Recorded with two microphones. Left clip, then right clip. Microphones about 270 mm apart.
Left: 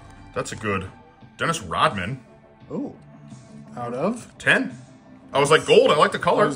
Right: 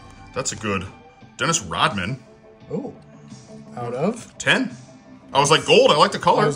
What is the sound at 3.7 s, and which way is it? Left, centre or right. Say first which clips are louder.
Speech: right 1 dB; right.